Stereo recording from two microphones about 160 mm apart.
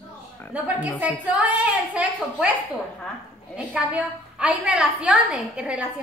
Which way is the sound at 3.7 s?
5° right (ahead or behind).